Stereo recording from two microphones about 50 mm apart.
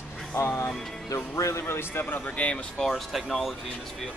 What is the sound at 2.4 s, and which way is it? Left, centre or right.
Speech, left.